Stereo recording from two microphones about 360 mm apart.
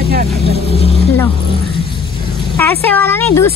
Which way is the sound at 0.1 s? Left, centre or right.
Right.